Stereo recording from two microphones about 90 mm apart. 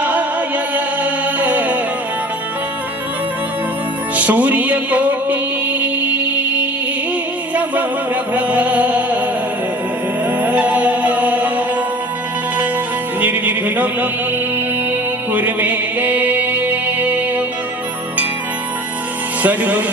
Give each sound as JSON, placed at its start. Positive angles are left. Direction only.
{"t": 0.0, "sound": "music", "side_deg": -15}
{"t": 4.1, "sound": "music", "side_deg": -15}
{"t": 10.2, "sound": "music", "side_deg": -15}
{"t": 13.1, "sound": "music", "side_deg": -20}
{"t": 15.3, "sound": "music", "side_deg": -20}
{"t": 19.4, "sound": "music", "side_deg": -15}